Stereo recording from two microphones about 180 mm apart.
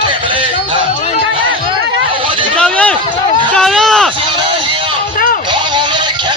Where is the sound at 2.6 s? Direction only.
5° left (ahead or behind).